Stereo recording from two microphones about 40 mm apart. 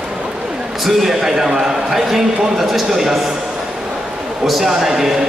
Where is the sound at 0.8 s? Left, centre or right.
Centre.